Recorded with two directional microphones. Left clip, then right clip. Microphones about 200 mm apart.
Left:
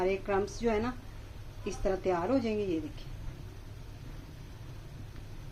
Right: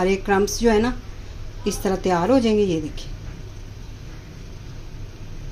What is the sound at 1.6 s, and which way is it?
Speech, 40° right (ahead or behind).